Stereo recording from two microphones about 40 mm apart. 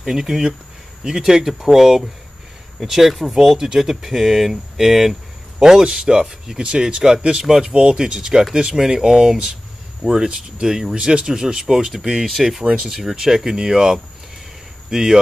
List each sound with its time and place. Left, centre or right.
0.0 s speech: centre
12.6 s speech: right
13.1 s speech: centre